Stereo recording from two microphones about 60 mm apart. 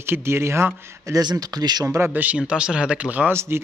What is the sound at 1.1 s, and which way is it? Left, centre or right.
Speech, right.